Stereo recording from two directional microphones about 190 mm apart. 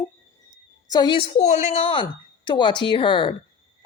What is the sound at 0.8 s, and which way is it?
Speech, 20° left (ahead or behind).